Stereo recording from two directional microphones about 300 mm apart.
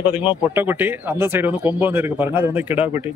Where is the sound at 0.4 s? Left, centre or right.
Centre.